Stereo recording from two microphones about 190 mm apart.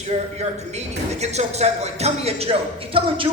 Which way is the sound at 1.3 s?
35° right (ahead or behind).